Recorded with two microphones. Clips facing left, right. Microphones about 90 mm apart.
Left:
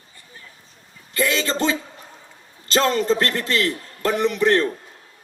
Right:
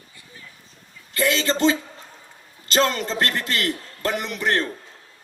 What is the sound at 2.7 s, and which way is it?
A man's voice, 30° left (ahead or behind).